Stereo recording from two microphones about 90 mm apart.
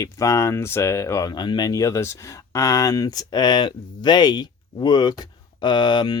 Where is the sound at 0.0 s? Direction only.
35° left (ahead or behind).